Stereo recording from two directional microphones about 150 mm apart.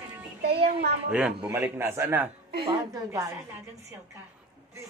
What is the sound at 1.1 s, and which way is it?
A woman's voice, 10° right (ahead or behind).